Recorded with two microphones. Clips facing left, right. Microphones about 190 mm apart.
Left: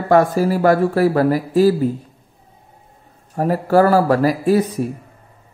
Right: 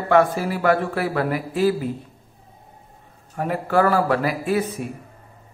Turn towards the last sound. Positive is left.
turn(degrees=40)  # may be behind; listen again after turning